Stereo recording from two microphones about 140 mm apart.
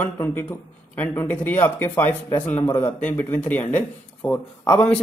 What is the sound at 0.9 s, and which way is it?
Speech, 10° left (ahead or behind).